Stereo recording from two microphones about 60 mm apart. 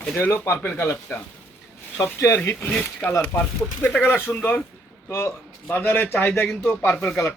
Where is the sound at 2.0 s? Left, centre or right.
Left.